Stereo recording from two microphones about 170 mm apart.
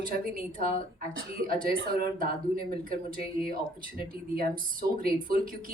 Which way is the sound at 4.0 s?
60° right (ahead or behind).